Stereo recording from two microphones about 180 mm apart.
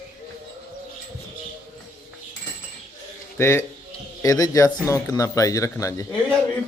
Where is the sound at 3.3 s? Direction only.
15° left (ahead or behind).